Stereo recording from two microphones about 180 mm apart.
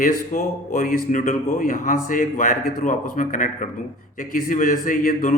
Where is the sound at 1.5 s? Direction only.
50° left (ahead or behind).